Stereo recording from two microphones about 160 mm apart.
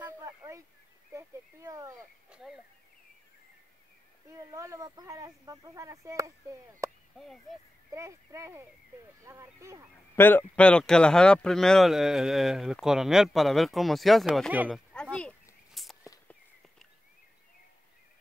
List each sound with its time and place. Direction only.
0.2 s a sound: 20° right (ahead or behind)
2.2 s speech: 5° right (ahead or behind)
4.3 s speech: 20° right (ahead or behind)
6.8 s a sound: 20° right (ahead or behind)
7.9 s speech: 20° right (ahead or behind)
10.1 s speech: 10° left (ahead or behind)
14.7 s chop: 5° left (ahead or behind)
15.7 s a sound: centre (ahead or behind)
16.0 s walk: 15° left (ahead or behind)